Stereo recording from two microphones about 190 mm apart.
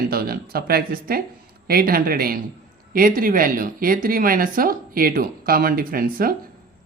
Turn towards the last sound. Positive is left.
turn(degrees=-50)  # may be behind; listen again after turning